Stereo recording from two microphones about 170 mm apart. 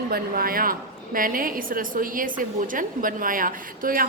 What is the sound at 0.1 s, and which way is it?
A woman's voice, 60° right (ahead or behind).